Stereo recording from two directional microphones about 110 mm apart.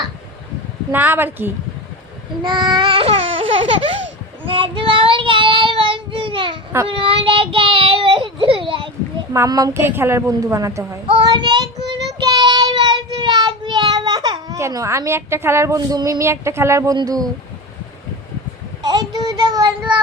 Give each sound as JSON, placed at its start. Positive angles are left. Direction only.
{"t": 0.9, "sound": "a woman's voice", "side_deg": -15}
{"t": 2.4, "sound": "babbling", "side_deg": -45}
{"t": 4.4, "sound": "child singing", "side_deg": -50}
{"t": 9.3, "sound": "a child's voice", "side_deg": -30}
{"t": 9.7, "sound": "a woman's voice", "side_deg": -20}
{"t": 11.1, "sound": "child singing", "side_deg": -45}
{"t": 14.6, "sound": "a woman's voice", "side_deg": -30}
{"t": 18.8, "sound": "child singing", "side_deg": -40}